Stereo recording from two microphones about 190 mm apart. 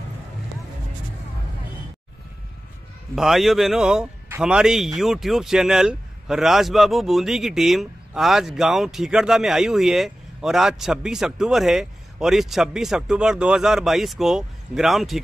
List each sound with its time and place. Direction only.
3.2 s speech: centre (ahead or behind)